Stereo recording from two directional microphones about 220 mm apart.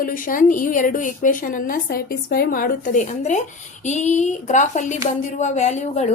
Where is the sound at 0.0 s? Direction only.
40° left (ahead or behind).